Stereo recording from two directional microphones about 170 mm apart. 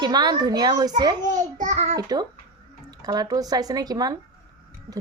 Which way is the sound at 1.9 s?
25° right (ahead or behind).